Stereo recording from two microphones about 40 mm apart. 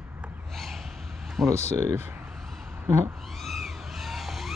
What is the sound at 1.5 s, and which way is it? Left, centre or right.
Speech, right.